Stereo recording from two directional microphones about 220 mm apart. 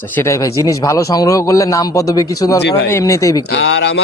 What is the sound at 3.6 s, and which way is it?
Speech, 50° left (ahead or behind).